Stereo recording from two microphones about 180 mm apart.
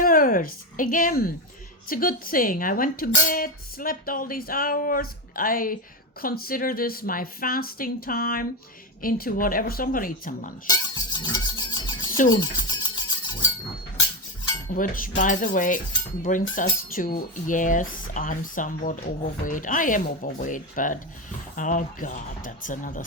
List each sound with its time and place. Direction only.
0.0 s a sound: 50° left (ahead or behind)
1.9 s speech: 50° left (ahead or behind)
10.7 s music: 20° left (ahead or behind)
14.7 s speech: 50° left (ahead or behind)